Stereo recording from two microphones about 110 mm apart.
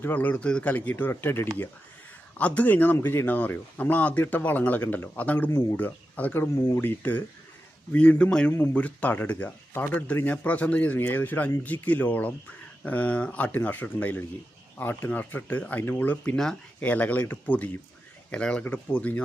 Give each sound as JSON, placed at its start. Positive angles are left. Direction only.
{"t": 0.0, "sound": "speech", "side_deg": 15}